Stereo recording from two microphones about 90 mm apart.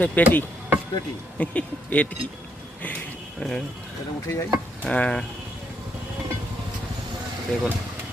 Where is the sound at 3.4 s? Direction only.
5° left (ahead or behind).